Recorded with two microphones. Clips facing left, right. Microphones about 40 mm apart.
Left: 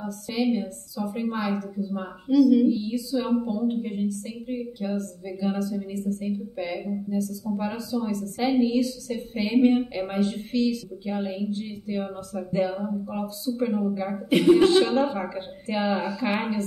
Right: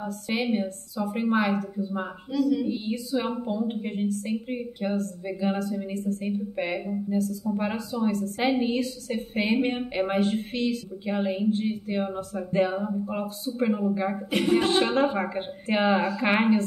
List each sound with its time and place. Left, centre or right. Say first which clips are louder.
0.0 s a woman's voice: left 2 dB; right
2.3 s a sound: left 8 dB; centre
2.6 s a woman's voice: left 5 dB; right